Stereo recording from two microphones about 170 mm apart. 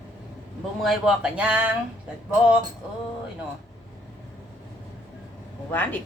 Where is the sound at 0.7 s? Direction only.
Centre (ahead or behind).